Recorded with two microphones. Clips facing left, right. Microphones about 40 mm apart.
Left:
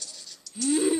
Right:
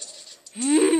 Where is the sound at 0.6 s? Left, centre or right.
Right.